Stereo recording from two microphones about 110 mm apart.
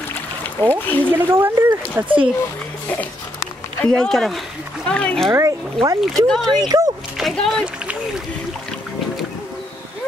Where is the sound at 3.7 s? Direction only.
5° left (ahead or behind).